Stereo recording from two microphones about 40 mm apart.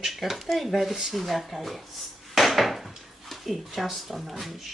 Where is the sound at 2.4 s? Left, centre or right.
Centre.